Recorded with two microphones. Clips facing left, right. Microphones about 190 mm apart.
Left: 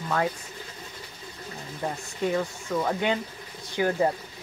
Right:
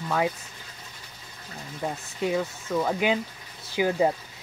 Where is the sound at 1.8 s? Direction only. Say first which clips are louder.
Even; 5° right (ahead or behind).